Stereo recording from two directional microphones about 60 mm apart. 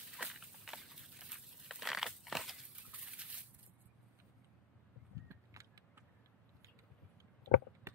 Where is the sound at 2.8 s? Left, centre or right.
Centre.